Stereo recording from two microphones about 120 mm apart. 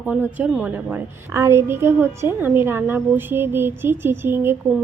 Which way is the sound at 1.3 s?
25° right (ahead or behind).